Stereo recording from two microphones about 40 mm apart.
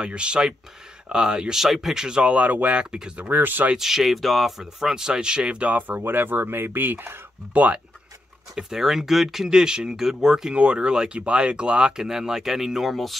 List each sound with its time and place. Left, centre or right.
0.0 s speech: right
1.5 s speech: centre
2.2 s speech: right
2.8 s speech: right
3.3 s speech: right
3.7 s speech: centre
5.6 s speech: right
7.5 s speech: right
8.5 s speech: centre
9.5 s speech: centre
10.5 s speech: right
12.1 s speech: centre
12.9 s speech: centre